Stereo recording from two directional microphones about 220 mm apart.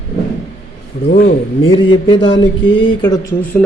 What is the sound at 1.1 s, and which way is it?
Speech, 40° left (ahead or behind).